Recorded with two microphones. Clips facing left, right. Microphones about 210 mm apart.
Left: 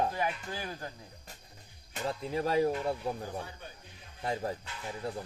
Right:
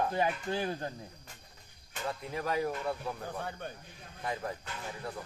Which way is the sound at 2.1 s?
30° left (ahead or behind).